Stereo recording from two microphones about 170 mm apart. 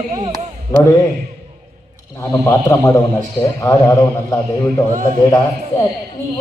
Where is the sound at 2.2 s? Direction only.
15° left (ahead or behind).